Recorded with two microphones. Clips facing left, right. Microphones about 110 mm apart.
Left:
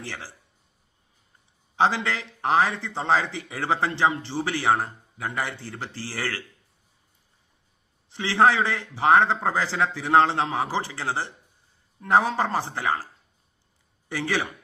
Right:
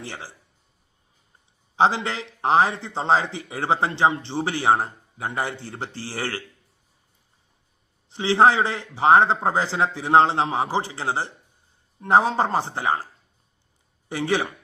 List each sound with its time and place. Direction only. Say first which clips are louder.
0.0 s speech: right 1 dB; 20° right (ahead or behind)
1.7 s speech: right 2 dB; 20° right (ahead or behind)
8.1 s speech: right 3 dB; 20° right (ahead or behind)
14.1 s speech: right 3 dB; 20° right (ahead or behind)